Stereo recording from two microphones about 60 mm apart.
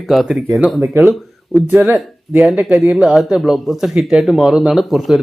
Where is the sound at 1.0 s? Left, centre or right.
Right.